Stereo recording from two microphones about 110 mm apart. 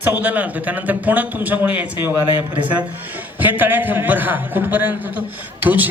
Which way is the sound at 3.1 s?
15° right (ahead or behind).